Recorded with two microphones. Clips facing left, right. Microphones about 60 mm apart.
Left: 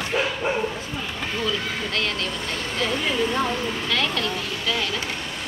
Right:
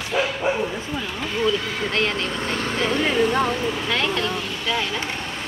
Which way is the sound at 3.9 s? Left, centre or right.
Right.